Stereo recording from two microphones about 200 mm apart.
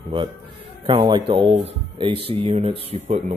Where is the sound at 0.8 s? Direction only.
25° right (ahead or behind).